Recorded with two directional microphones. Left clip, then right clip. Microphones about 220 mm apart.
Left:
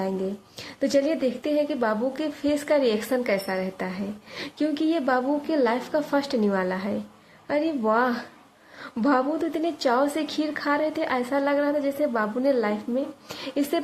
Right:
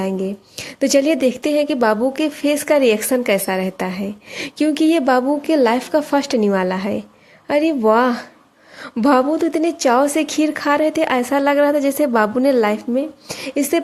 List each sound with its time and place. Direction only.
0.8 s a woman's voice: 40° right (ahead or behind)